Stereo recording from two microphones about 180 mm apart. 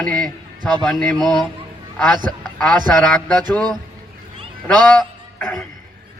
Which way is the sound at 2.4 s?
5° left (ahead or behind).